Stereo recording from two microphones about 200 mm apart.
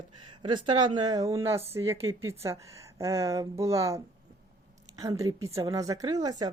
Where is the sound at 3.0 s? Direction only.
15° right (ahead or behind).